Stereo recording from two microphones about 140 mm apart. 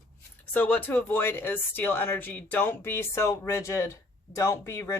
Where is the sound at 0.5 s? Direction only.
10° left (ahead or behind).